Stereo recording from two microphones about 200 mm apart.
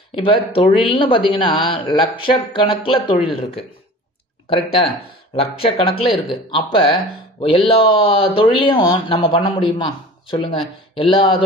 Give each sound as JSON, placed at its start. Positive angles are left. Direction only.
{"t": 0.1, "sound": "speech", "side_deg": 25}
{"t": 5.3, "sound": "speech", "side_deg": 30}